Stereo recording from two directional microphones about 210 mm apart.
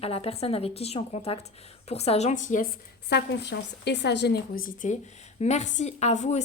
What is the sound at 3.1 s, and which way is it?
A woman's voice, 55° left (ahead or behind).